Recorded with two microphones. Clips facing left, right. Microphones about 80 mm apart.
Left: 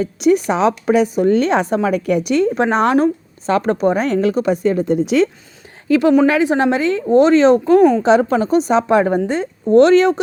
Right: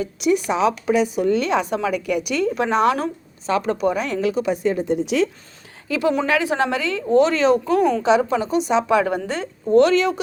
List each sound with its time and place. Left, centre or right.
0.0 s speech: left
6.2 s a woman's voice: left
8.0 s speech: left
9.2 s speech: left
9.9 s a woman's voice: left